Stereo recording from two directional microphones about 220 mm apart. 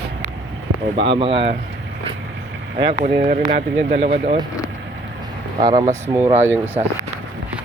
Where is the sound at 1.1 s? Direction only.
25° right (ahead or behind).